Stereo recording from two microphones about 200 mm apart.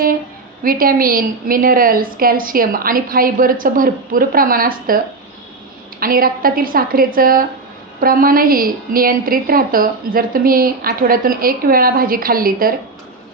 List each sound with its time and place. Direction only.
0.6 s a woman's voice: 45° right (ahead or behind)